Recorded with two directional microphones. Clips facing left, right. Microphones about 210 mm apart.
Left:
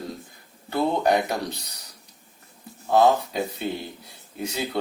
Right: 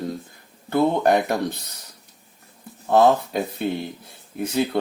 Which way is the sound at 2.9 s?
55° right (ahead or behind).